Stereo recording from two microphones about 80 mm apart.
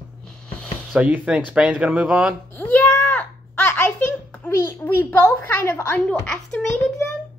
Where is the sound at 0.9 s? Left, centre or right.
Centre.